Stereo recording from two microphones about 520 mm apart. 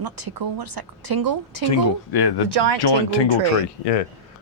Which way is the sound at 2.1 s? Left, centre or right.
Left.